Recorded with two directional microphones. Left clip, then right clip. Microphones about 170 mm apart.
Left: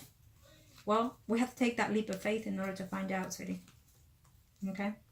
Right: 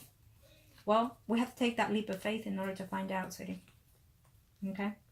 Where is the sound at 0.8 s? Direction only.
30° right (ahead or behind).